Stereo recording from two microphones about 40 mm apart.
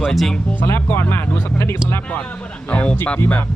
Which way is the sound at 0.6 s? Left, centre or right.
Left.